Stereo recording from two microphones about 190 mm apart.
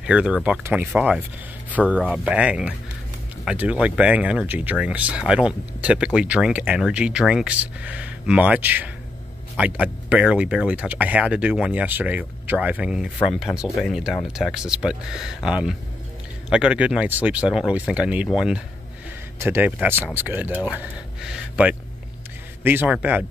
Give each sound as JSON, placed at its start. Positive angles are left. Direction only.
{"t": 0.0, "sound": "speech", "side_deg": -5}